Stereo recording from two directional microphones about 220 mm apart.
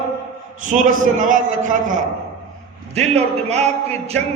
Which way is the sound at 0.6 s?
35° right (ahead or behind).